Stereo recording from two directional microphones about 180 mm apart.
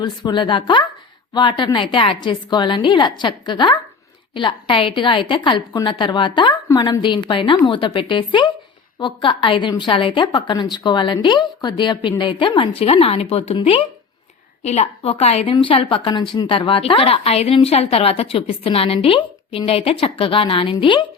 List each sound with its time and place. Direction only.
0.0 s a woman's voice: 25° left (ahead or behind)